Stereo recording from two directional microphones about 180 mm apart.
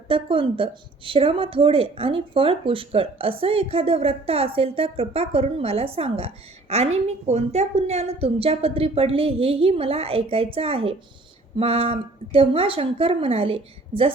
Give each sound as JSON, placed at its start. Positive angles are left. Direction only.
{"t": 0.1, "sound": "speech", "side_deg": -30}